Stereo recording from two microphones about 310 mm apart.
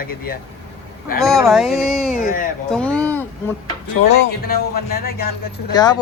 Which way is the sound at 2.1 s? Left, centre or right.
Left.